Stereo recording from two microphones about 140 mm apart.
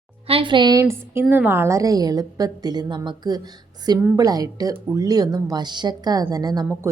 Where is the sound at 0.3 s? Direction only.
40° right (ahead or behind).